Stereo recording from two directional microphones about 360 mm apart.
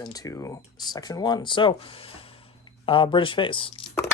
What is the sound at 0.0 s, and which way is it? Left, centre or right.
Speech, centre.